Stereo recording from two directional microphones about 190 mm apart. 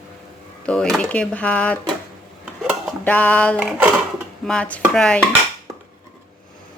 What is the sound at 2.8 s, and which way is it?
Music, 10° left (ahead or behind).